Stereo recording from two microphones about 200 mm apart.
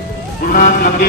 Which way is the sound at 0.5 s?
45° left (ahead or behind).